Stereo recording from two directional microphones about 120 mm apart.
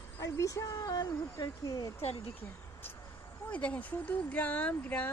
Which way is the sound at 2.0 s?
60° left (ahead or behind).